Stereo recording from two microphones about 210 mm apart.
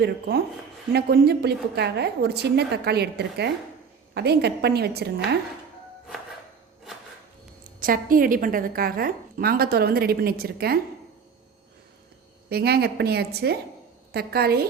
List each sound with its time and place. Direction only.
0.9 s a woman's voice: 50° right (ahead or behind)
7.8 s a woman's voice: 40° right (ahead or behind)
12.5 s a woman's voice: 50° right (ahead or behind)